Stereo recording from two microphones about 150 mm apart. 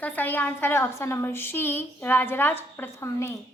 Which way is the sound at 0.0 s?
10° left (ahead or behind).